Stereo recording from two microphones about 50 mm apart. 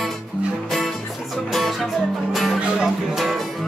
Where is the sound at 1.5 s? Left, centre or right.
Centre.